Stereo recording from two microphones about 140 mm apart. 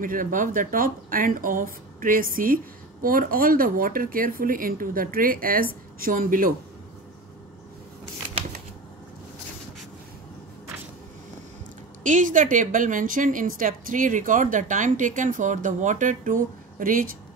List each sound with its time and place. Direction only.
0.0 s speech: 75° right (ahead or behind)
12.0 s a woman's voice: 65° right (ahead or behind); by 17.1 s 80° right